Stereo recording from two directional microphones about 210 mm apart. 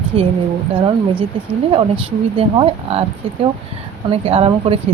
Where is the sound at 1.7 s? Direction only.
25° right (ahead or behind).